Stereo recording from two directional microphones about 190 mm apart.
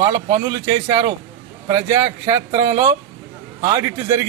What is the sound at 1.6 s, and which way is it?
Speech, 20° right (ahead or behind).